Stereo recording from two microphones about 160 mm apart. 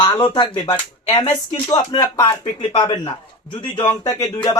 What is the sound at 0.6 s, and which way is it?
Speech, 30° left (ahead or behind).